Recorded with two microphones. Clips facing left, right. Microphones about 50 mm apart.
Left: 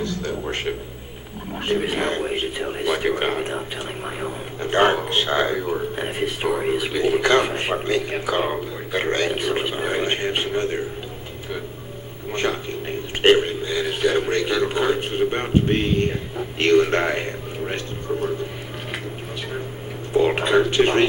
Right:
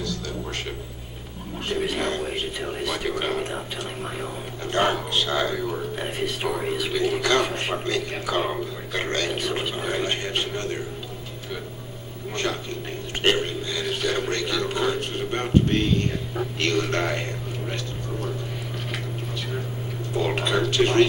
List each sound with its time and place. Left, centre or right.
0.0 s a sound: left
1.7 s speech: left
3.5 s speech: centre
4.6 s speech: left
12.3 s a sound: left
20.1 s whispering: left